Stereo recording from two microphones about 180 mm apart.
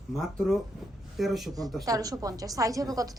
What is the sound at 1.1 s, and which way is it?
Speech, centre (ahead or behind).